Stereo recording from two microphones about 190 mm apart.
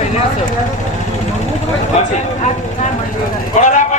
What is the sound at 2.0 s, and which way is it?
Speech, 35° left (ahead or behind).